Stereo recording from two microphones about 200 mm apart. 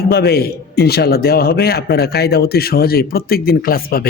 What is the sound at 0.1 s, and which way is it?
A man's voice, 50° left (ahead or behind).